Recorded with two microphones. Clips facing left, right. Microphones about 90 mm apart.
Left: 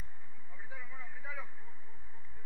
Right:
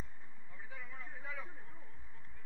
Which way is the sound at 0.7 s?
15° left (ahead or behind).